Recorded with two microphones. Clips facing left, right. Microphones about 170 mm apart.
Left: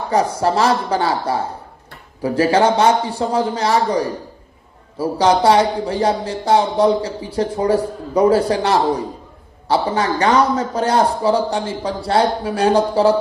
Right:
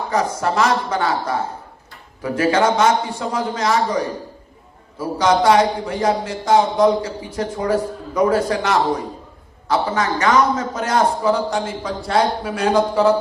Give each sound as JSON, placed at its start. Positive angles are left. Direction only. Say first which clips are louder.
{"t": 0.1, "sound": "speech", "louder": "left 4 dB", "side_deg": 30}